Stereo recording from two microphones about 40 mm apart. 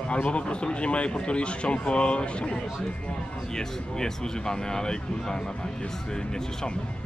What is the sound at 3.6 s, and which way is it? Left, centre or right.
Speech, centre.